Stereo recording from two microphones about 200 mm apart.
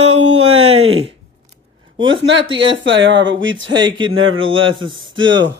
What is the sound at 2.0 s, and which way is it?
Speech, 25° right (ahead or behind).